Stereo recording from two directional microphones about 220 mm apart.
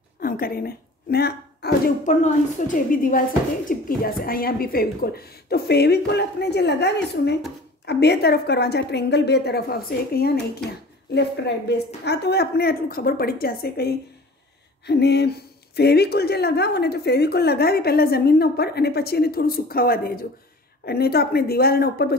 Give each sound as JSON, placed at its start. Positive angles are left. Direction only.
{"t": 0.2, "sound": "a woman's voice", "side_deg": 45}